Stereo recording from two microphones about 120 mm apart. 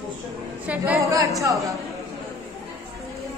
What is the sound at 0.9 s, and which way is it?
Speech, 25° right (ahead or behind).